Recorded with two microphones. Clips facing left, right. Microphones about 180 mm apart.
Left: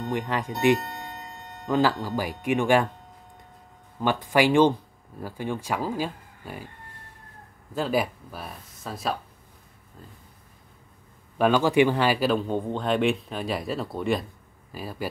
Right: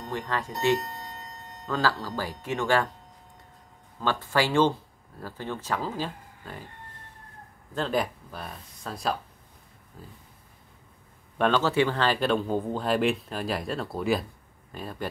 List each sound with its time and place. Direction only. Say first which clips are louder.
0.0 s speech: left 4 dB; 20° left (ahead or behind)
1.7 s speech: left 5 dB; 15° left (ahead or behind)
4.0 s speech: left 4 dB; 15° left (ahead or behind)
7.7 s speech: left 2 dB; 10° left (ahead or behind)
11.3 s speech: left 3 dB; 10° left (ahead or behind)